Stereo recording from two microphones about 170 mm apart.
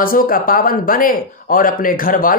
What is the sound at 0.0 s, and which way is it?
Speech, 55° left (ahead or behind).